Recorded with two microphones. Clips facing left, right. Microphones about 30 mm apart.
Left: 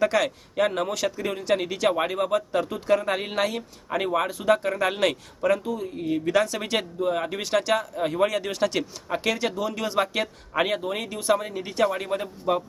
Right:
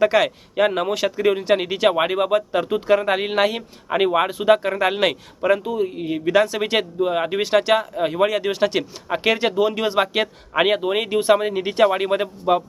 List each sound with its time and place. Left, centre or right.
0.0 s speech: right